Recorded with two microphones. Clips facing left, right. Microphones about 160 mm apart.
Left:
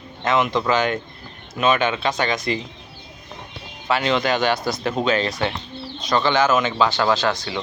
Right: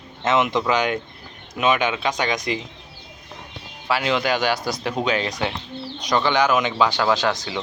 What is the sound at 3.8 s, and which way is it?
Speech, 10° right (ahead or behind).